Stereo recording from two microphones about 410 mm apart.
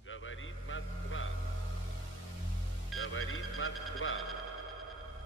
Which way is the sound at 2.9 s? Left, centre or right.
Left.